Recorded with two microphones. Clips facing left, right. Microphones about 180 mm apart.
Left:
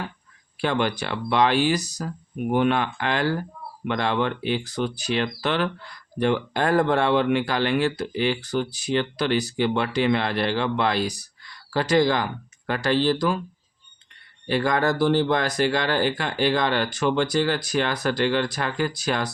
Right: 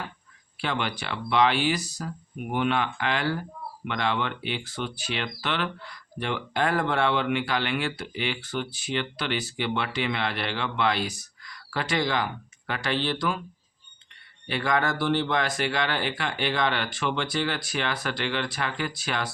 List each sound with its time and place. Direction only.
0.6 s speech: 45° left (ahead or behind)
14.4 s speech: 40° left (ahead or behind)